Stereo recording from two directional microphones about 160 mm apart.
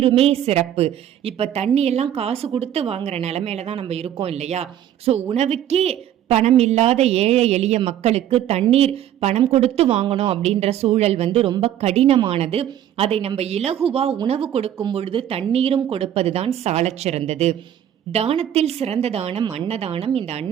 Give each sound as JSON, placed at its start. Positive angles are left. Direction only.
{"t": 0.0, "sound": "a woman's voice", "side_deg": -35}